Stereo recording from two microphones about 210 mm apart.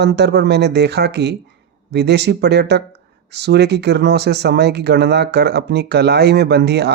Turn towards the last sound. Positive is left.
turn(degrees=-50)  # may be behind; listen again after turning